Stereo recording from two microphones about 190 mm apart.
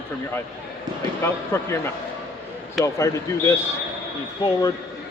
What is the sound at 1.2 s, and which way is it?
A man's voice, 10° left (ahead or behind).